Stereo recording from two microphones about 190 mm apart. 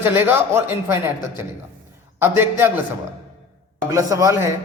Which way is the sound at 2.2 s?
10° right (ahead or behind).